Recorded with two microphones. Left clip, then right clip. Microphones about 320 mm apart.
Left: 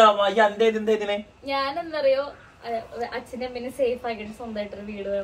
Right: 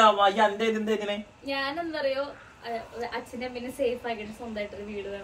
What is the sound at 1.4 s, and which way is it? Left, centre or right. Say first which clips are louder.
A woman's voice: left 2 dB; centre.